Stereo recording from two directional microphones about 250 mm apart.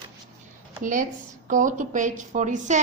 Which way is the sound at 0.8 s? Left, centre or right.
Right.